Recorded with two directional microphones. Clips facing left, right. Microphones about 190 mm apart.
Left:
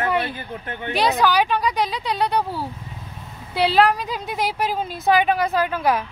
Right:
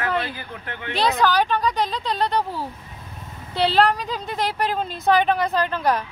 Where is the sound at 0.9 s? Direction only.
15° left (ahead or behind).